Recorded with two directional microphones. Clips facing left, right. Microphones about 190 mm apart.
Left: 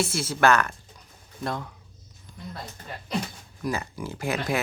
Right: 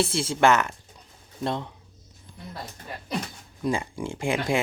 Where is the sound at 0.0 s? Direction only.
30° right (ahead or behind).